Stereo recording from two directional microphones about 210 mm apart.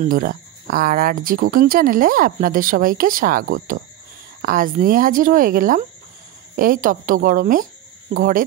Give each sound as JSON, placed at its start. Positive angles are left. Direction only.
{"t": 0.0, "sound": "speech", "side_deg": -40}